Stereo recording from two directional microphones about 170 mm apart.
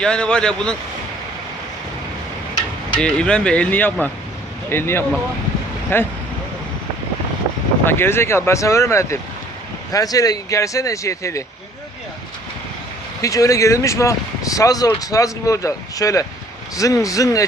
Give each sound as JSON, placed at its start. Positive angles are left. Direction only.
{"t": 0.0, "sound": "speech", "side_deg": 5}
{"t": 3.0, "sound": "speech", "side_deg": 5}
{"t": 7.9, "sound": "speech", "side_deg": 15}
{"t": 13.2, "sound": "speech", "side_deg": 20}